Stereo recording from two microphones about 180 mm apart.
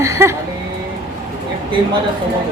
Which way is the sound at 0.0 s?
15° right (ahead or behind).